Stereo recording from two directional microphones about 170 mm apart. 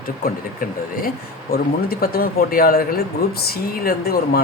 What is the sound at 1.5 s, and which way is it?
Speech, 65° left (ahead or behind).